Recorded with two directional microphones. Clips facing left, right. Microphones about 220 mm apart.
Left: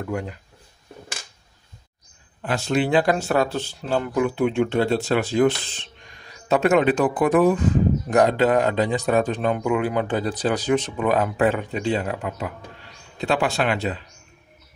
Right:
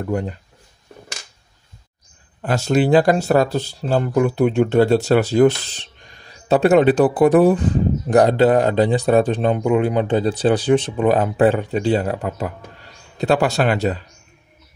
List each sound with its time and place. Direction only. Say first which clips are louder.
0.0 s speech: right 5 dB; 35° right (ahead or behind)
2.4 s speech: right 5 dB; 40° right (ahead or behind)